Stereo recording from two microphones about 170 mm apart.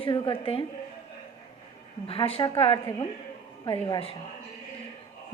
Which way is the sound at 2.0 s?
35° left (ahead or behind).